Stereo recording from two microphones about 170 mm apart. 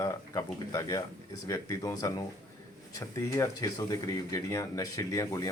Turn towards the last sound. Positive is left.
turn(degrees=20)  # may be behind; listen again after turning